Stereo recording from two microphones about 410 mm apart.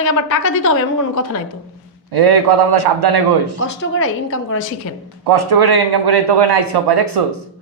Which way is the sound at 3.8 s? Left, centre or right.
Left.